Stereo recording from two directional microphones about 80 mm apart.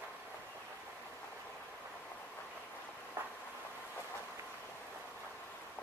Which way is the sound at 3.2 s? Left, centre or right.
Right.